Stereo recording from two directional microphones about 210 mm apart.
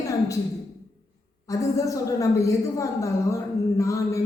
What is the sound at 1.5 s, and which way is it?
A woman's voice, 15° left (ahead or behind).